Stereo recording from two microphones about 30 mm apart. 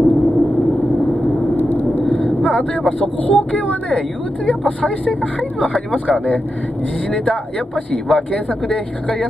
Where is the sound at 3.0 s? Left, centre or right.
Left.